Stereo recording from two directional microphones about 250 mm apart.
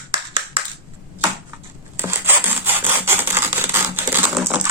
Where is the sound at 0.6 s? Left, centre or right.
Right.